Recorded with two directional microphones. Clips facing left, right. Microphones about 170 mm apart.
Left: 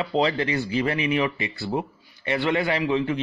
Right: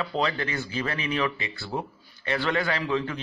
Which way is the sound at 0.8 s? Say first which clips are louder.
Left 2 dB; 15° left (ahead or behind).